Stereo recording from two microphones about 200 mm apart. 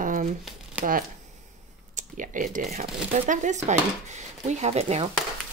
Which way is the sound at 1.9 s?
40° right (ahead or behind).